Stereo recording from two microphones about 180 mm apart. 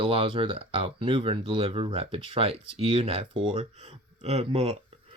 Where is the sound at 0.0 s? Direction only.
30° right (ahead or behind).